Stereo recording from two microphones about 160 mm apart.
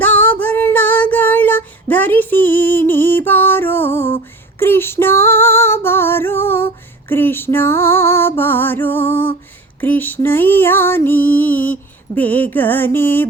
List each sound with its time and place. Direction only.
0.0 s child singing: 10° left (ahead or behind)
4.6 s female singing: 15° left (ahead or behind)
7.1 s music: 15° left (ahead or behind)